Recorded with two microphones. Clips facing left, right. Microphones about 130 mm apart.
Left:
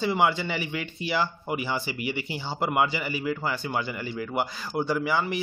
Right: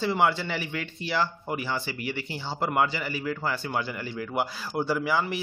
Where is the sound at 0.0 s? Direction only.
Centre (ahead or behind).